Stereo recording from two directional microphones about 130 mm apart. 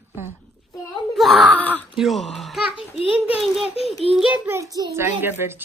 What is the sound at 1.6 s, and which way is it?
Speech, 10° left (ahead or behind).